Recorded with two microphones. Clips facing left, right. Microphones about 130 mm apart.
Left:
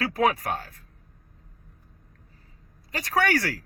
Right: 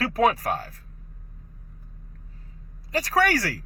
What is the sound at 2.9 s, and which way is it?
Speech, 30° right (ahead or behind).